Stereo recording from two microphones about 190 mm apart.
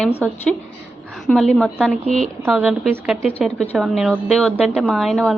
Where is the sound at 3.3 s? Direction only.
5° left (ahead or behind).